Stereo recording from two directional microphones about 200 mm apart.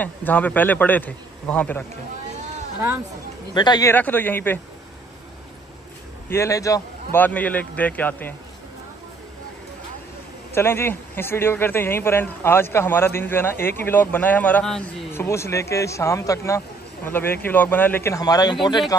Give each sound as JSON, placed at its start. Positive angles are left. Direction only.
{"t": 0.0, "sound": "speech", "side_deg": 10}
{"t": 3.5, "sound": "speech", "side_deg": 20}
{"t": 3.9, "sound": "speech", "side_deg": 10}
{"t": 6.2, "sound": "speech", "side_deg": 15}
{"t": 10.5, "sound": "speech", "side_deg": 10}